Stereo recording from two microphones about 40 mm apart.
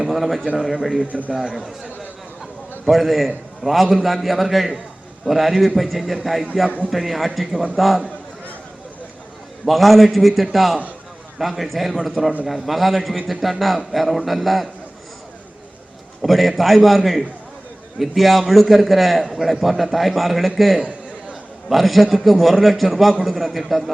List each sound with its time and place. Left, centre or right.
0.0 s a man's voice: centre
2.8 s a man's voice: centre
9.6 s a man's voice: centre
16.2 s a man's voice: centre
20.7 s a sound: right
21.7 s a man's voice: centre